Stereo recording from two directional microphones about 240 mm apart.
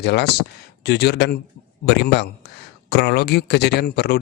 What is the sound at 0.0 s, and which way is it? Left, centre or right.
Speech, left.